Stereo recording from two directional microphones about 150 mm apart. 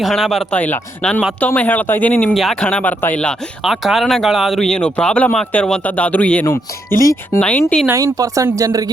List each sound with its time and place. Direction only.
0.0 s speech: centre (ahead or behind)
2.3 s speech: centre (ahead or behind)
7.9 s speech: 20° right (ahead or behind)